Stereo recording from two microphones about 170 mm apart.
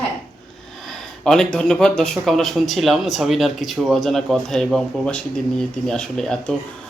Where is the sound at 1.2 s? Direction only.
5° left (ahead or behind).